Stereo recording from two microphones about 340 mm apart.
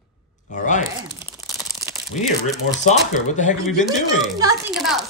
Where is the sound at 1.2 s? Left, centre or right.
Centre.